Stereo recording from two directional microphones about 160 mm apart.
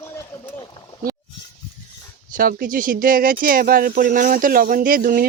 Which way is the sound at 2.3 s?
60° right (ahead or behind).